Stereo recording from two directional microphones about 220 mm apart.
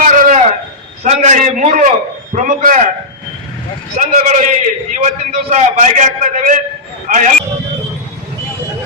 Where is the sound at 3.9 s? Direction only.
35° right (ahead or behind).